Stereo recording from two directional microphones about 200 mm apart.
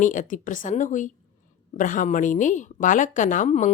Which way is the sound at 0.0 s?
40° left (ahead or behind).